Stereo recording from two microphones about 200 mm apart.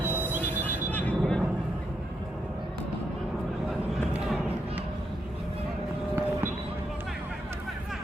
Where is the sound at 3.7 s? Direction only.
5° right (ahead or behind).